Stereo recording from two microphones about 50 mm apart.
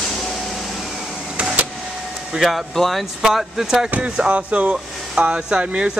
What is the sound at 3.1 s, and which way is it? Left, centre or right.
Speech, centre.